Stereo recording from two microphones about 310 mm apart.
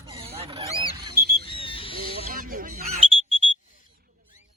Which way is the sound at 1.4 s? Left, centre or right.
Centre.